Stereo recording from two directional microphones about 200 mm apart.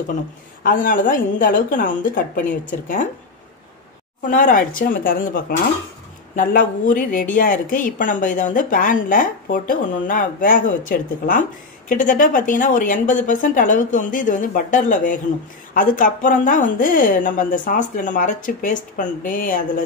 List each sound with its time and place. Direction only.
0.7 s speech: 40° left (ahead or behind)
4.3 s speech: 40° left (ahead or behind)